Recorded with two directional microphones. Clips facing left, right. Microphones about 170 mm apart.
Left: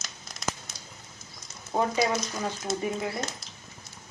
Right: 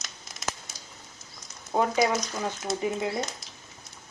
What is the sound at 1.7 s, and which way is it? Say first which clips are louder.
Speech: right 2 dB; 10° right (ahead or behind).